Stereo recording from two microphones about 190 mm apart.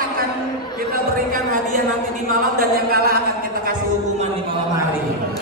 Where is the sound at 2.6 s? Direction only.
50° right (ahead or behind).